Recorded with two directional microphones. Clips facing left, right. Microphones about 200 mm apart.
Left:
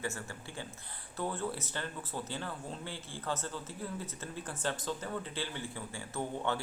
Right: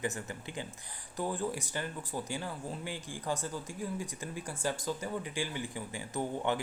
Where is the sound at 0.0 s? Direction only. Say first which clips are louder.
Right 3 dB; 15° right (ahead or behind).